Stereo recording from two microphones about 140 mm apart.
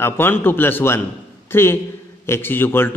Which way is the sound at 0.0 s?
15° left (ahead or behind).